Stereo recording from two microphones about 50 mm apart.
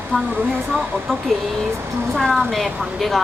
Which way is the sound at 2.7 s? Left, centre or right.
Right.